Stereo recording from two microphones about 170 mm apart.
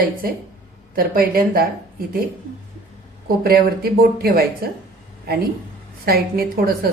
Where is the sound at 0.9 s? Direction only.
60° right (ahead or behind).